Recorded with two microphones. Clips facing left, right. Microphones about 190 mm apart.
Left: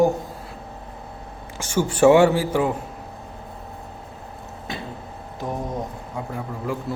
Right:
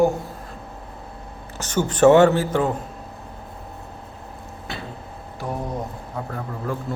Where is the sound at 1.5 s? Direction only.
10° left (ahead or behind).